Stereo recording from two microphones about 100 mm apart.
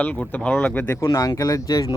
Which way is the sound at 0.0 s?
15° left (ahead or behind).